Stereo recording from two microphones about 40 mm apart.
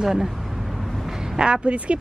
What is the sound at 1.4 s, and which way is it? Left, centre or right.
Speech, right.